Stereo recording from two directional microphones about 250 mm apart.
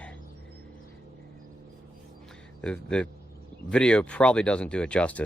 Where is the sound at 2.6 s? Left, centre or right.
Centre.